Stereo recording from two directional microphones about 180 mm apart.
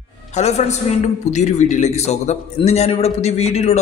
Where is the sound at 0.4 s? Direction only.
40° left (ahead or behind).